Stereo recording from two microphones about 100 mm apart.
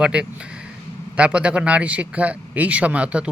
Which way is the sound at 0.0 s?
10° right (ahead or behind).